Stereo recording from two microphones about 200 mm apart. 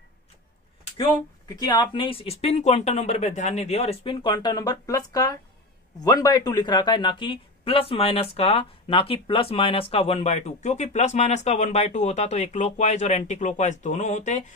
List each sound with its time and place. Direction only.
0.9 s speech: 20° left (ahead or behind); by 14.4 s 35° left (ahead or behind)